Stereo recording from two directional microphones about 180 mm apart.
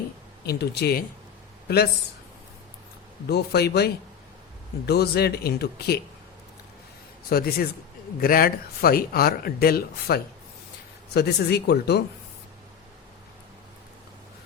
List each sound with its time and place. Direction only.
0.4 s speech: 65° left (ahead or behind)
3.2 s speech: 65° left (ahead or behind)
7.3 s speech: 55° left (ahead or behind)